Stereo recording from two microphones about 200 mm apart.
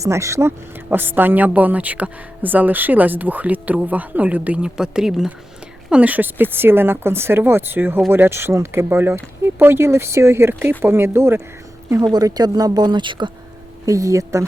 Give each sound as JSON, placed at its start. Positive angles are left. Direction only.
{"t": 0.0, "sound": "a woman's voice", "side_deg": -15}